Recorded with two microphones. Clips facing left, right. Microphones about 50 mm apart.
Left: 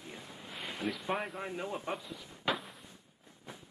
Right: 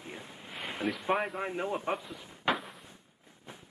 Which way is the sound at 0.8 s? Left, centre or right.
Centre.